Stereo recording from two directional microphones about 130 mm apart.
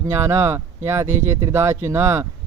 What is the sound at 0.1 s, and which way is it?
Speech, 20° right (ahead or behind).